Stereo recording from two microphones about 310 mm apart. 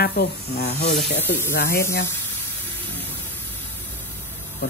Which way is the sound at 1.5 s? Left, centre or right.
Left.